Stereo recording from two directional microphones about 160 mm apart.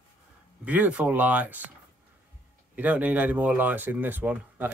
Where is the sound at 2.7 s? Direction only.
10° right (ahead or behind).